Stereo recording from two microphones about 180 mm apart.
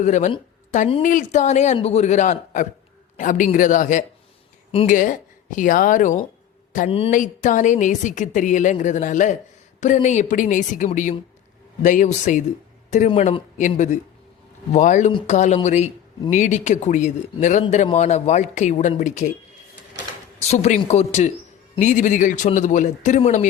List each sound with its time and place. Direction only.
0.0 s a man's voice: 45° left (ahead or behind)
20.4 s a man's voice: 40° left (ahead or behind)